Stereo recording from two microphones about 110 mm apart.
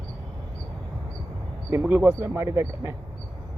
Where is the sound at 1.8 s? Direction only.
15° right (ahead or behind).